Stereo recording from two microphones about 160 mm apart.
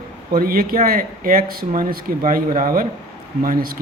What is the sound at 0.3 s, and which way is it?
Speech, 65° right (ahead or behind).